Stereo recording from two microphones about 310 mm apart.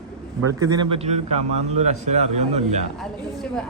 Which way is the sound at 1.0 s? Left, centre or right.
Right.